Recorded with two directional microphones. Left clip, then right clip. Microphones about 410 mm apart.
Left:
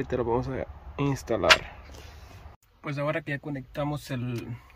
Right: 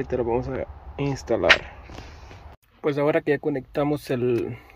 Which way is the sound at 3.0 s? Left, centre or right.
Centre.